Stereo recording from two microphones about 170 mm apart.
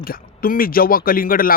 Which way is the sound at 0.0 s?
60° left (ahead or behind).